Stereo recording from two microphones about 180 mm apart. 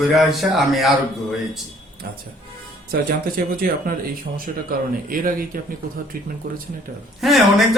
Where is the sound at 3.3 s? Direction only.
55° right (ahead or behind).